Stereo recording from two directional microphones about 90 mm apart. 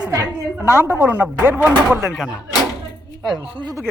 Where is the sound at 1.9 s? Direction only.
Centre (ahead or behind).